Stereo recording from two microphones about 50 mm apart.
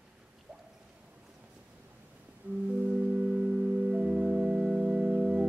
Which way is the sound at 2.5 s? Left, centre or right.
Right.